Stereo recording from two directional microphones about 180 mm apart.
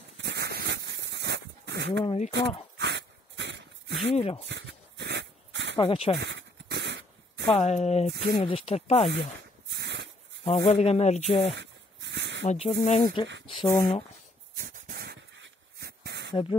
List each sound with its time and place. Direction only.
0.2 s a sound: 65° right (ahead or behind)
2.0 s speech: 40° left (ahead or behind)
2.8 s dog: 75° right (ahead or behind)
4.1 s speech: 35° left (ahead or behind)
4.5 s dog: 80° right
5.8 s speech: 30° left (ahead or behind)
6.1 s a sound: 75° right (ahead or behind)
7.5 s speech: 40° left (ahead or behind)
9.7 s a sound: 70° right (ahead or behind)
10.4 s speech: 30° left (ahead or behind)
11.5 s a sound: 80° right
12.4 s speech: 35° left (ahead or behind)
14.6 s dog: 55° right (ahead or behind); by 16.3 s 70° right (ahead or behind)